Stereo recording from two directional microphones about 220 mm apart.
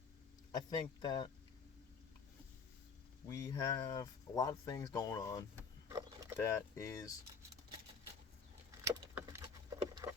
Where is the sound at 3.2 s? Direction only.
15° left (ahead or behind).